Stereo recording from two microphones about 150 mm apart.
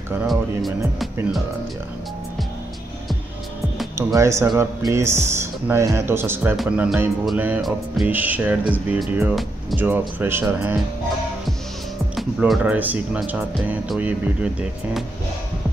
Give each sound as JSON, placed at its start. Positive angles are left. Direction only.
{"t": 0.3, "sound": "speech", "side_deg": 0}
{"t": 3.9, "sound": "speech", "side_deg": -20}
{"t": 6.5, "sound": "speech", "side_deg": 0}
{"t": 7.6, "sound": "speech", "side_deg": 0}
{"t": 8.1, "sound": "speech", "side_deg": -10}
{"t": 12.2, "sound": "speech", "side_deg": -5}